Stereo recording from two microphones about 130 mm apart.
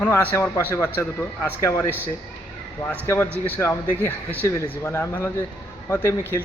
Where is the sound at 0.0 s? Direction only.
10° left (ahead or behind).